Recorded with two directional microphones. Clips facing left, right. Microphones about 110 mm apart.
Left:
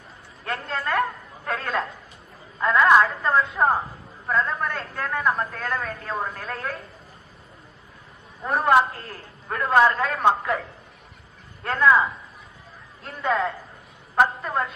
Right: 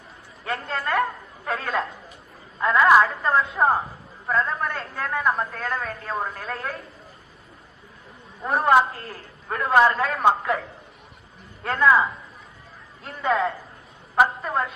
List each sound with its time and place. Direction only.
0.4 s a sound: centre (ahead or behind)
2.6 s a man's voice: 5° right (ahead or behind)
8.4 s a man's voice: centre (ahead or behind)